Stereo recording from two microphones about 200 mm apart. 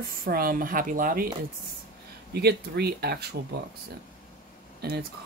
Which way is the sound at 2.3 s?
55° right (ahead or behind).